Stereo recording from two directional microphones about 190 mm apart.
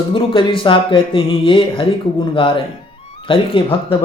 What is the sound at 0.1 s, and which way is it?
Mantra, 25° left (ahead or behind).